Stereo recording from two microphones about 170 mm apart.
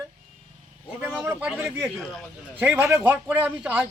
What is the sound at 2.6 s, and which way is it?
A man's voice, 15° right (ahead or behind).